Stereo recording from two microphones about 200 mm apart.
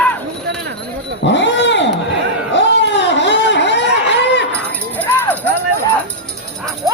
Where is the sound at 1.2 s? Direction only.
60° left (ahead or behind).